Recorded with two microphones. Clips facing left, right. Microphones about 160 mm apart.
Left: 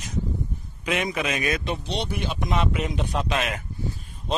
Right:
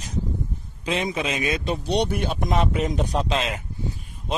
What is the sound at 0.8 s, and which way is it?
Speech, 25° right (ahead or behind).